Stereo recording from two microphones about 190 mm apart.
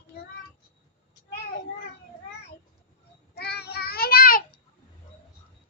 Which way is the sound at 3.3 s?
60° left (ahead or behind).